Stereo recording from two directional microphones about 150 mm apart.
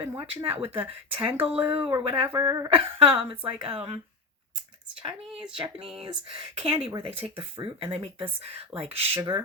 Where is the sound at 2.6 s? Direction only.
40° right (ahead or behind).